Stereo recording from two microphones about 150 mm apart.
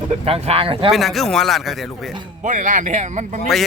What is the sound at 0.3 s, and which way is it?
Speech, 40° right (ahead or behind).